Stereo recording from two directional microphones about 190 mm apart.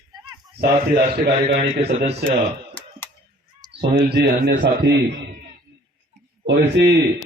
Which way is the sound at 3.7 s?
60° right (ahead or behind).